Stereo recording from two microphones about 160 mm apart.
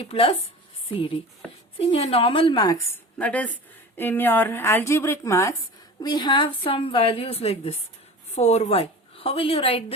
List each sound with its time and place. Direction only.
0.0 s a woman's voice: 35° left (ahead or behind)
1.8 s a woman's voice: 40° left (ahead or behind)
3.2 s a woman's voice: 10° left (ahead or behind); by 9.8 s 35° left (ahead or behind)